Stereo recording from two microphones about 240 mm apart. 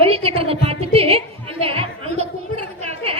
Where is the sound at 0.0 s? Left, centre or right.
Right.